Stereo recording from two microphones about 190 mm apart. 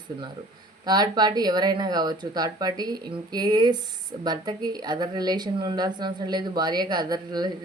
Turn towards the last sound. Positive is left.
turn(degrees=-20)  # may be behind; listen again after turning